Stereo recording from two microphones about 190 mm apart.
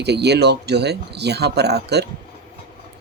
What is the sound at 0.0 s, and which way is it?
Speech, 60° right (ahead or behind).